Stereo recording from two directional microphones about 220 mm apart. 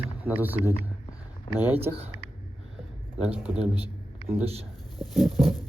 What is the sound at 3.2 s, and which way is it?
Speech, 10° right (ahead or behind).